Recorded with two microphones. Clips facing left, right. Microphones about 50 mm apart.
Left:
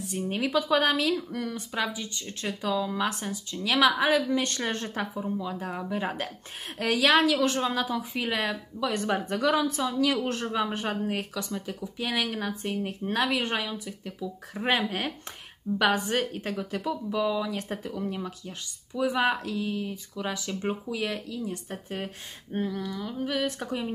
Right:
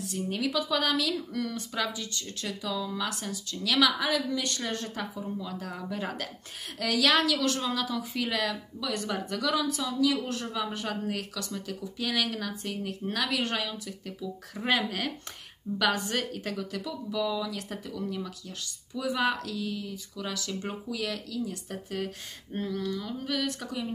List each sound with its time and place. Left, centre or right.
0.0 s speech: left
1.1 s a woman's voice: left
22.5 s speech: centre; by 23.9 s left